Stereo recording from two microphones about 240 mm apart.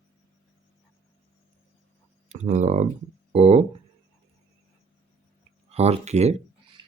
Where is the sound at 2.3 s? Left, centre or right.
Right.